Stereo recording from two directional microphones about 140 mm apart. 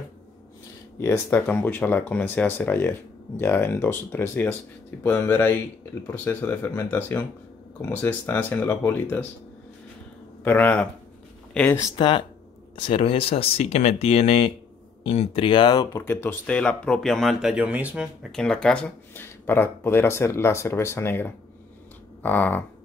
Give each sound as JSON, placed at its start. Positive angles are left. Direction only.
{"t": 0.9, "sound": "speech", "side_deg": 20}
{"t": 10.4, "sound": "speech", "side_deg": 15}
{"t": 11.9, "sound": "speech", "side_deg": 35}
{"t": 16.1, "sound": "speech", "side_deg": 15}
{"t": 18.3, "sound": "speech", "side_deg": 5}